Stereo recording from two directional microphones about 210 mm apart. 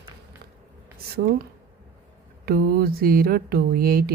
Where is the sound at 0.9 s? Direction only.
45° right (ahead or behind).